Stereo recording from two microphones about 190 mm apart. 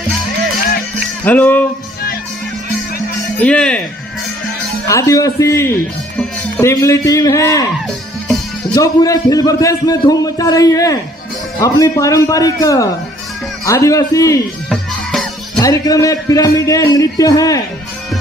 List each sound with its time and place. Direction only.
1.2 s speech: 10° left (ahead or behind)
3.4 s speech: 5° left (ahead or behind)
4.8 s speech: 15° left (ahead or behind)
8.7 s a man's voice: 20° left (ahead or behind)
14.7 s music: centre (ahead or behind)
15.6 s speech: 20° left (ahead or behind)